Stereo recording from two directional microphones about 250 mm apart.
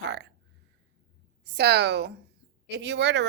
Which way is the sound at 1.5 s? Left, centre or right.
Right.